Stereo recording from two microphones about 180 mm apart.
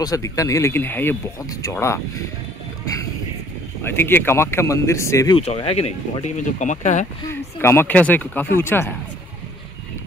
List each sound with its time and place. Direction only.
0.0 s speech: 20° left (ahead or behind)
3.8 s speech: 10° left (ahead or behind)
5.4 s speech: 35° left (ahead or behind)
7.2 s speech: 15° left (ahead or behind)